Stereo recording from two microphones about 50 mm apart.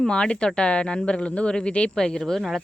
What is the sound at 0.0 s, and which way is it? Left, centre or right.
Speech, centre.